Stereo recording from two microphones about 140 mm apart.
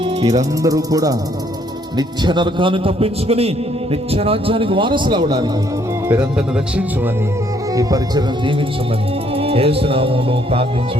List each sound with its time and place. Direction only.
0.0 s a man's voice: 30° right (ahead or behind)
6.1 s speech: 10° right (ahead or behind)
7.7 s speech: 25° right (ahead or behind)
9.3 s music: 45° right (ahead or behind)